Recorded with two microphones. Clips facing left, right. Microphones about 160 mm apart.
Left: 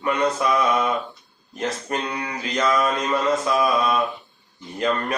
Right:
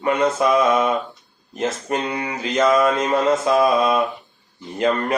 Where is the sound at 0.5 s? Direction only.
25° right (ahead or behind).